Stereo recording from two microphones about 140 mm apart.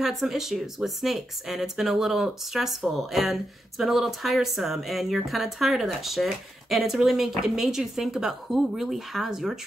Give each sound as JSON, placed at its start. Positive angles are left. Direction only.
{"t": 0.0, "sound": "speech", "side_deg": 0}